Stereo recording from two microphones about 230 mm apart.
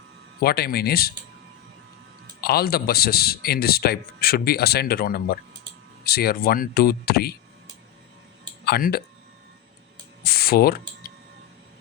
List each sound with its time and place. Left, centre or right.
0.3 s speech: left
2.4 s speech: left
8.6 s speech: left
10.2 s typing: left